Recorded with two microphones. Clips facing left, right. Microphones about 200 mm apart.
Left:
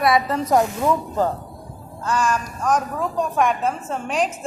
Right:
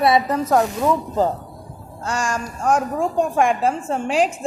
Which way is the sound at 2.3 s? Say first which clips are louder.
Right 2 dB; 30° right (ahead or behind).